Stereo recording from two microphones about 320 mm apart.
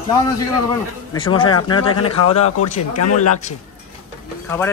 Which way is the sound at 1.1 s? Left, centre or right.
Centre.